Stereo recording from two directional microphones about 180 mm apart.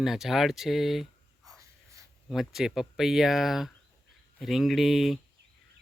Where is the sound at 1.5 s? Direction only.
15° right (ahead or behind).